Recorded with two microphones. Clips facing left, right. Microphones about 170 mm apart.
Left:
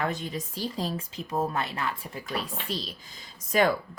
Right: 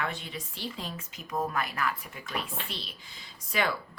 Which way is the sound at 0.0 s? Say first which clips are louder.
Left 5 dB; 40° left (ahead or behind).